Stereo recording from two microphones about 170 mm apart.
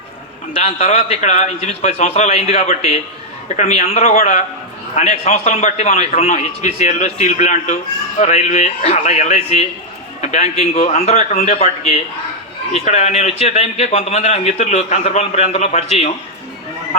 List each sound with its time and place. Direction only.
0.5 s a man's voice: 40° left (ahead or behind)